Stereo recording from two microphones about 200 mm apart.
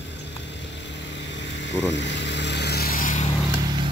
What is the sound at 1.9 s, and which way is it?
Vehicle, 60° left (ahead or behind).